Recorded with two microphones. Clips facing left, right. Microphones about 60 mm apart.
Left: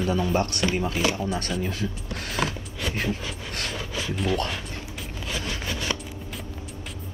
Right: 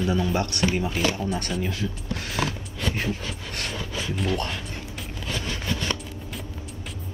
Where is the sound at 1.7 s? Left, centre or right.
Left.